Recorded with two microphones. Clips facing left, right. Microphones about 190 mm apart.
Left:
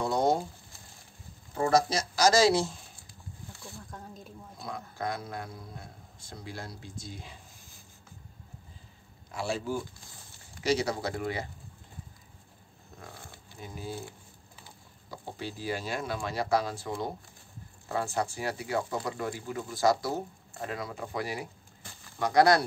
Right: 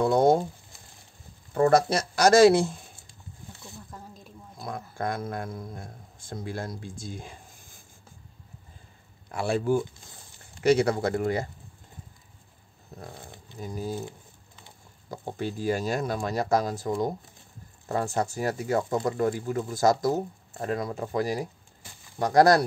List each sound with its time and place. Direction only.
0.0 s speech: 55° right (ahead or behind)
1.6 s speech: 55° right (ahead or behind)
3.9 s a woman's voice: centre (ahead or behind)
4.9 s speech: 50° right (ahead or behind)
9.3 s speech: 55° right (ahead or behind)
12.9 s speech: 35° right (ahead or behind)
15.0 s speech: 50° right (ahead or behind)